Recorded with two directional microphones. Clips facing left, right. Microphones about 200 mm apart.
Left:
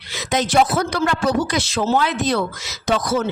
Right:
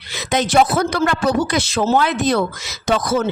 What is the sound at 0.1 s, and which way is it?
Speech, 60° right (ahead or behind).